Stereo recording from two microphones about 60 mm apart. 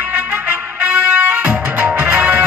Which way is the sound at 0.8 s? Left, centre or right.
Right.